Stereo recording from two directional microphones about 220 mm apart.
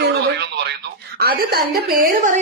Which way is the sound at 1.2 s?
45° right (ahead or behind).